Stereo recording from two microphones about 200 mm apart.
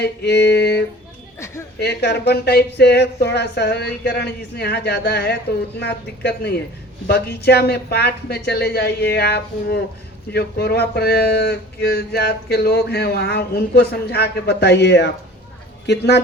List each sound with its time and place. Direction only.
0.0 s speech: 55° left (ahead or behind)